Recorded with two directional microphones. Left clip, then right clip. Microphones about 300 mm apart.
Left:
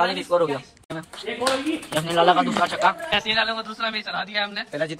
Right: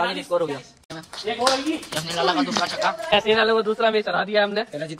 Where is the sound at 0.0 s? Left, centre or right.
Centre.